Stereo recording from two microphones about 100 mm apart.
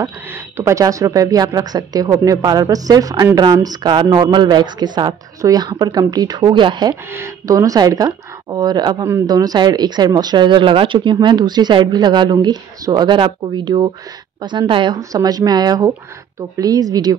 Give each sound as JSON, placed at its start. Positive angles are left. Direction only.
{"t": 0.6, "sound": "speech", "side_deg": -30}
{"t": 7.2, "sound": "speech", "side_deg": -35}
{"t": 15.0, "sound": "speech", "side_deg": -40}